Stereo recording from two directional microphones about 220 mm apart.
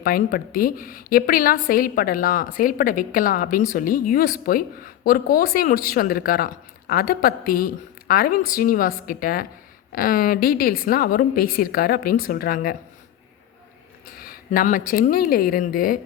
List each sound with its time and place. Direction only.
0.0 s a woman's voice: 40° left (ahead or behind)
14.3 s a woman's voice: 40° left (ahead or behind)